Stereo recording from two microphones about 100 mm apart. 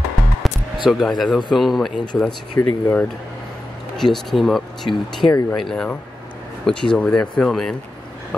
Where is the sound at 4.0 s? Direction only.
5° left (ahead or behind).